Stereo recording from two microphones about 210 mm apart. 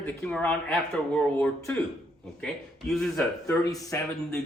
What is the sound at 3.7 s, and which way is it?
Speech, 15° left (ahead or behind).